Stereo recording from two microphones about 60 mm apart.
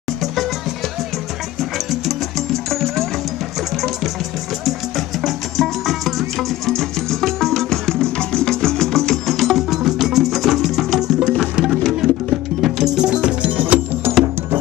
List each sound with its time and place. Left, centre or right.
1.6 s music: centre
4.6 s music: centre; by 13.7 s right
14.0 s music: right